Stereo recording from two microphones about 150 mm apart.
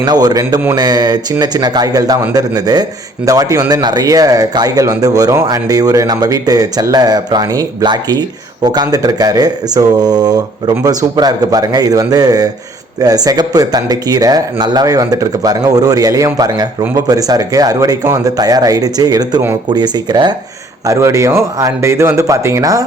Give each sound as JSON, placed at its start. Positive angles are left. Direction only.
{"t": 0.0, "sound": "speech", "side_deg": -25}